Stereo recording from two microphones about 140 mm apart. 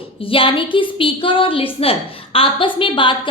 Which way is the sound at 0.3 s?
40° left (ahead or behind).